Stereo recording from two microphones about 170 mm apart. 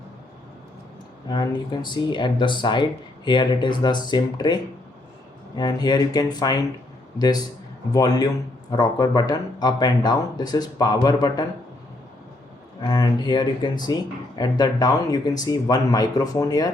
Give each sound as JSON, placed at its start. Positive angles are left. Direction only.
{"t": 1.3, "sound": "speech", "side_deg": 25}
{"t": 12.8, "sound": "speech", "side_deg": 25}